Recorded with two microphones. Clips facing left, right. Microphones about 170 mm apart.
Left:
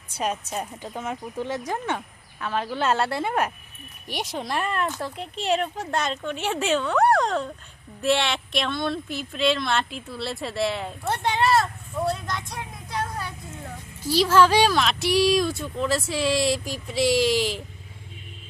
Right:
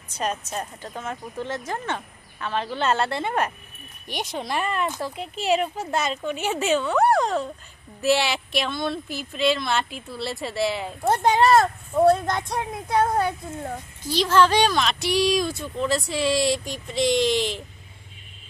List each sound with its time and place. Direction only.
0.1 s speech: 10° left (ahead or behind)
11.0 s speech: 40° right (ahead or behind)
14.1 s speech: 5° left (ahead or behind)